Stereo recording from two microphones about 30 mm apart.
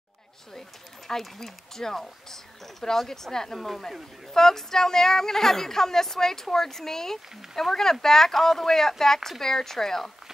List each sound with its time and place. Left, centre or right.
0.6 s speech: centre